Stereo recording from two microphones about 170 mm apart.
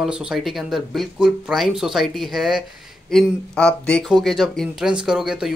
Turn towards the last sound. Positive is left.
turn(degrees=-5)  # may be behind; listen again after turning